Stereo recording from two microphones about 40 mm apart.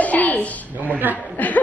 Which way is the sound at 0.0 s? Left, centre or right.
Left.